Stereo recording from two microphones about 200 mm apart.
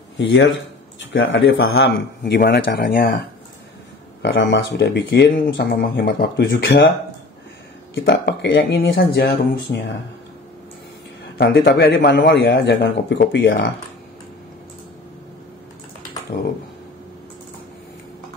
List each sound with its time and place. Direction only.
0.9 s a man's voice: 65° left (ahead or behind); by 3.2 s 45° left (ahead or behind)
4.2 s a man's voice: 65° left (ahead or behind)
8.0 s a man's voice: 55° left (ahead or behind)
11.3 s a man's voice: 50° left (ahead or behind)